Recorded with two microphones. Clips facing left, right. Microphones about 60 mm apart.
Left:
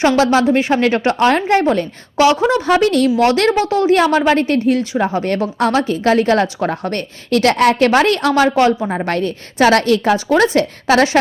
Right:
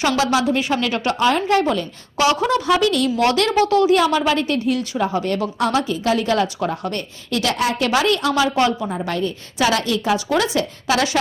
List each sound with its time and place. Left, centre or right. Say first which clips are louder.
0.0 s a woman's voice: left 5 dB; left